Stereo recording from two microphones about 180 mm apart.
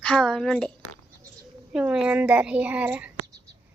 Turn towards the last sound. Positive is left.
turn(degrees=-10)  # may be behind; listen again after turning